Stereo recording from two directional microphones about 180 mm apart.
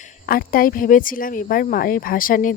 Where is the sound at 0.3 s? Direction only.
55° left (ahead or behind).